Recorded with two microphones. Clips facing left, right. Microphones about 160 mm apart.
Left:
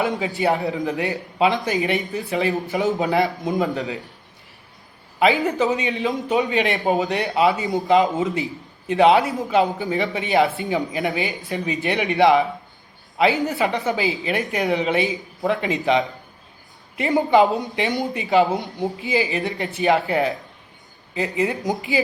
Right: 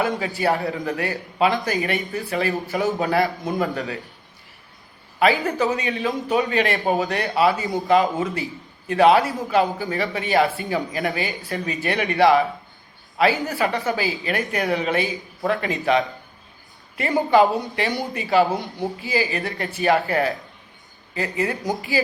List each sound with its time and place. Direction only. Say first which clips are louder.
0.3 s speech: left 2 dB; 20° left (ahead or behind)
5.5 s speech: left 1 dB; 20° left (ahead or behind)